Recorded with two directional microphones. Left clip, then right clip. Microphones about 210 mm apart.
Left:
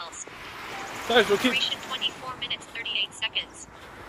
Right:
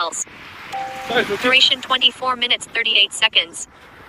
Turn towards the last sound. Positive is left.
turn(degrees=-60)  # may be behind; listen again after turning